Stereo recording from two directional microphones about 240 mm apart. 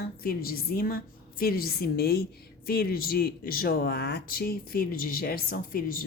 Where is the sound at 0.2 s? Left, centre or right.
Left.